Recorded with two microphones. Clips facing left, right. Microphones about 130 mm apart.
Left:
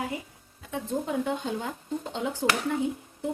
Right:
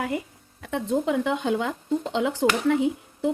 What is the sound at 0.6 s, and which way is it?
Speech, 75° right (ahead or behind).